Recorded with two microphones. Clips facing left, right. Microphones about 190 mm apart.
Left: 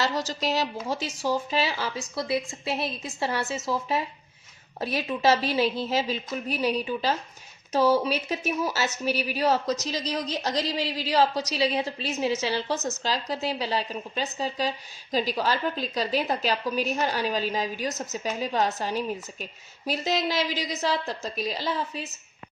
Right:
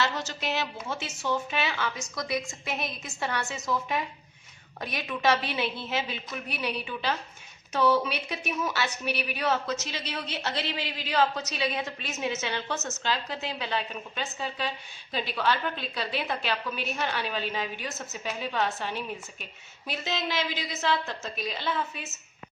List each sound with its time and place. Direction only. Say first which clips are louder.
0.0 s a woman's voice: left 3 dB; 35° left (ahead or behind)